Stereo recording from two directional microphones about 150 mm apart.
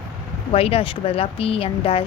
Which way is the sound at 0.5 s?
40° left (ahead or behind).